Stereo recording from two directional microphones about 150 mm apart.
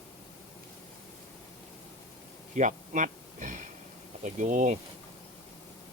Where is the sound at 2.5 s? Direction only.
55° right (ahead or behind).